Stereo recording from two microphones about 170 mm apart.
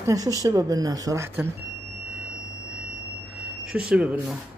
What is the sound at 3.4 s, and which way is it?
Speech, 5° right (ahead or behind).